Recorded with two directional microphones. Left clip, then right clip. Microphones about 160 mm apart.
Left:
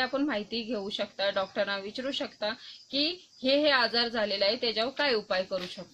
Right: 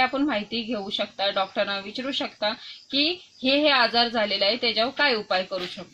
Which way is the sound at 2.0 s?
15° left (ahead or behind).